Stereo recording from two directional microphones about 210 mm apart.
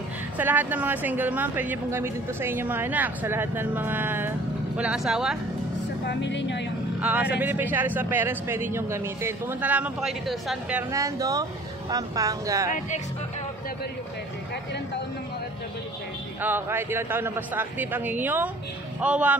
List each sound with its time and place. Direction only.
0.4 s a woman's voice: 10° right (ahead or behind)
6.0 s speech: 60° left (ahead or behind)
7.0 s a woman's voice: 5° right (ahead or behind)
16.3 s a woman's voice: 10° right (ahead or behind)